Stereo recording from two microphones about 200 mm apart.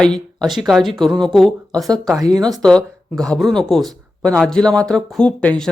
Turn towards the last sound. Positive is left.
turn(degrees=5)  # may be behind; listen again after turning